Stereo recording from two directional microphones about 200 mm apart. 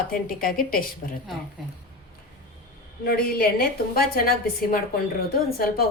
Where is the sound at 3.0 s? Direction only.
50° left (ahead or behind).